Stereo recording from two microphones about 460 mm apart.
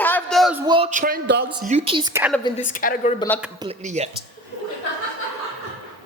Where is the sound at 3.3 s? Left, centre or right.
Centre.